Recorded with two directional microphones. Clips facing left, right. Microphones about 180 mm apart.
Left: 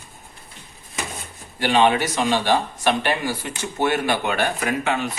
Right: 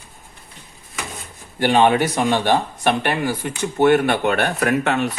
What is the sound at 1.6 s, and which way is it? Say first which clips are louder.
Speech: right 3 dB; 50° right (ahead or behind).